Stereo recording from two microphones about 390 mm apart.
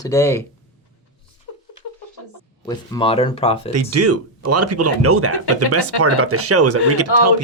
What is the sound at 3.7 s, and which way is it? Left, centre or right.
Speech, right.